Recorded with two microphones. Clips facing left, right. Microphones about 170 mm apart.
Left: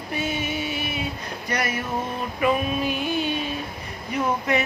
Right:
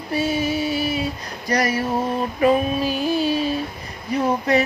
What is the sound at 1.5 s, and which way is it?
Speech, 35° right (ahead or behind).